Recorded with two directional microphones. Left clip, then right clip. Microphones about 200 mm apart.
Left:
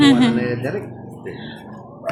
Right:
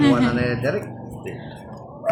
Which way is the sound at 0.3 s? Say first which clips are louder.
Even; 35° right (ahead or behind).